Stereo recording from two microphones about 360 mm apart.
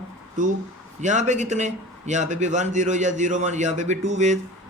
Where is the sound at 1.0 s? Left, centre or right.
Centre.